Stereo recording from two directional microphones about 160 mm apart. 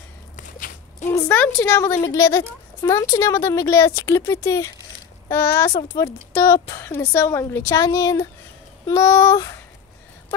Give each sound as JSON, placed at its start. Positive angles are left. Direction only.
{"t": 0.4, "sound": "walk", "side_deg": 55}
{"t": 1.3, "sound": "a woman's voice", "side_deg": 10}